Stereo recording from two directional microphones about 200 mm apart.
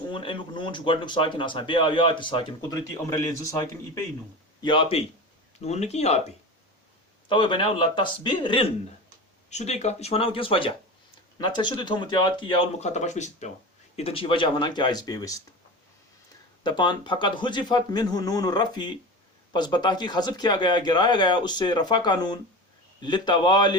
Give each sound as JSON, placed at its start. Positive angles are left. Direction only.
{"t": 0.1, "sound": "a man's voice", "side_deg": 25}
{"t": 7.3, "sound": "speech", "side_deg": 25}
{"t": 9.5, "sound": "speech", "side_deg": 35}
{"t": 16.6, "sound": "speech", "side_deg": 20}